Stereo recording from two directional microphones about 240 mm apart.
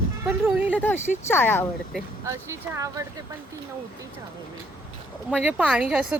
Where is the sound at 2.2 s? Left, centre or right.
Centre.